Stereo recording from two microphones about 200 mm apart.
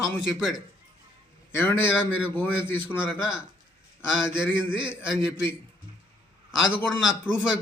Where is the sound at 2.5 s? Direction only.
10° left (ahead or behind).